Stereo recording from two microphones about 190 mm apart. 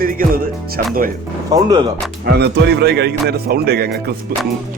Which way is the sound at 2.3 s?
60° right (ahead or behind).